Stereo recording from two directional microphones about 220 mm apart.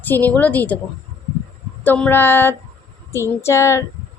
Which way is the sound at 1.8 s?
5° left (ahead or behind).